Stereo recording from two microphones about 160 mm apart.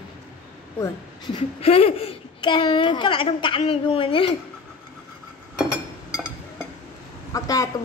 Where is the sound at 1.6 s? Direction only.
40° left (ahead or behind).